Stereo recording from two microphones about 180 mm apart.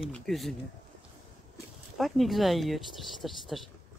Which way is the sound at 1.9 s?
Centre (ahead or behind).